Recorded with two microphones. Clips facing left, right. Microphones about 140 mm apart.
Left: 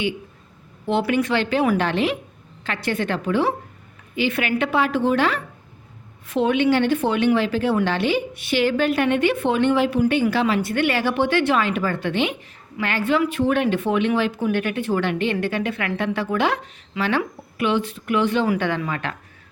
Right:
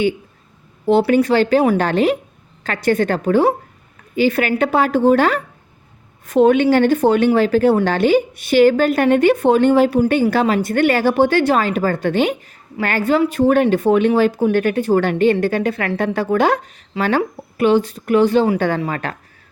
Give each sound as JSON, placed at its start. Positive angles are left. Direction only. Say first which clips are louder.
{"t": 0.9, "sound": "speech", "louder": "right 7 dB", "side_deg": -40}